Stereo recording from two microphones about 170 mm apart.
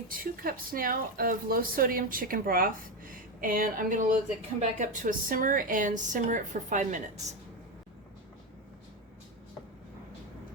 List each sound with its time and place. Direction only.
0.1 s a woman's voice: 55° right (ahead or behind)